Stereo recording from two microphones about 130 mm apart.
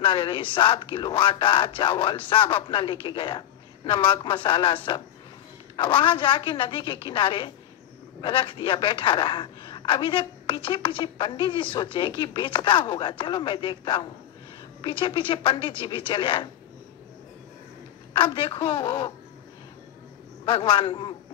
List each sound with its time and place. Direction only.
0.0 s speech: 40° left (ahead or behind)
18.1 s speech: 40° left (ahead or behind)
20.4 s speech: 40° left (ahead or behind)